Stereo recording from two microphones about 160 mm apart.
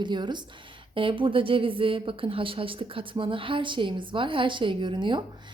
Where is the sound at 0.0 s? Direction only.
30° right (ahead or behind).